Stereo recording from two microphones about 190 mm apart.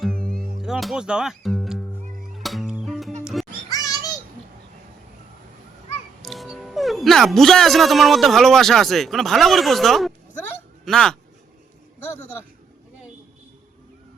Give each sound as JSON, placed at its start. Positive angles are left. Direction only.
{"t": 0.0, "sound": "music", "side_deg": 5}
{"t": 0.6, "sound": "speech", "side_deg": 0}
{"t": 2.3, "sound": "music", "side_deg": 0}
{"t": 3.7, "sound": "music", "side_deg": 20}
{"t": 6.2, "sound": "speech", "side_deg": 0}